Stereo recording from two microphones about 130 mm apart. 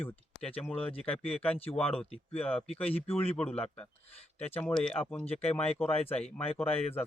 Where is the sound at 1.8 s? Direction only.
50° left (ahead or behind).